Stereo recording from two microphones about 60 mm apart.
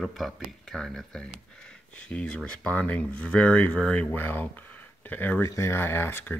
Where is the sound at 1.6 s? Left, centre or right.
Centre.